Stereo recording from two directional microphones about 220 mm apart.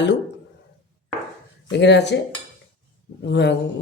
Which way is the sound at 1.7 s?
50° left (ahead or behind).